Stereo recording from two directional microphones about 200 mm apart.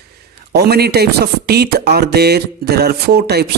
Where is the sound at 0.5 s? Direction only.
55° right (ahead or behind).